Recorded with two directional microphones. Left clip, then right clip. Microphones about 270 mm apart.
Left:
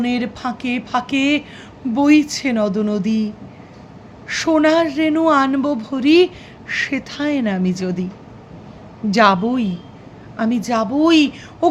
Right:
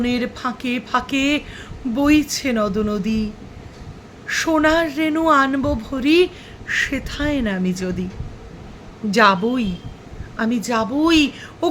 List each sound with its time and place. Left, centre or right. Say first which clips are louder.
0.0 s a woman's voice: even; centre
9.0 s a woman's voice: left 1 dB; centre